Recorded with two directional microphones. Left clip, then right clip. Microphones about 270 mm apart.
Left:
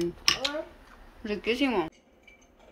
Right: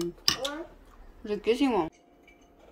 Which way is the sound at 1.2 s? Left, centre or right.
Centre.